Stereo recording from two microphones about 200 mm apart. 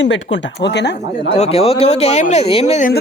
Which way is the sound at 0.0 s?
65° left (ahead or behind).